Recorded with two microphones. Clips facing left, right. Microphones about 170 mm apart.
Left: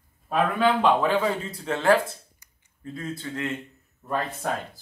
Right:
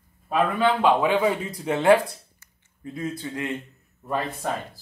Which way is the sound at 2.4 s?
15° left (ahead or behind).